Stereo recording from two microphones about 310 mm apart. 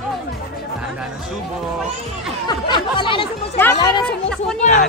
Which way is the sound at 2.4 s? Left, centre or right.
Centre.